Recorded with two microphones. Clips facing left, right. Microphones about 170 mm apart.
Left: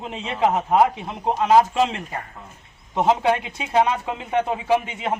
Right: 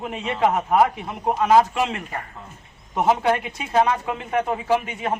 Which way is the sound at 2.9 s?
20° left (ahead or behind).